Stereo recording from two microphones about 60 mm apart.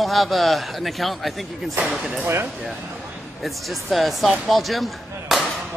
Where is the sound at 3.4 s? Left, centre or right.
Centre.